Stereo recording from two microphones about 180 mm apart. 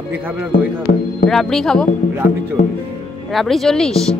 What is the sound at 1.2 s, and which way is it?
Speech, centre (ahead or behind).